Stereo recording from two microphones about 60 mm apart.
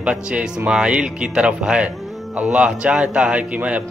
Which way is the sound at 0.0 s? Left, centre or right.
Centre.